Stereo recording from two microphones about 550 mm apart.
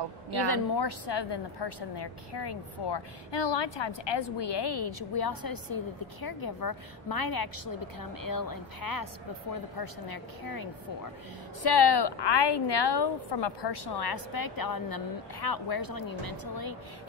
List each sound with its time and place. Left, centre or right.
0.3 s a woman's voice: left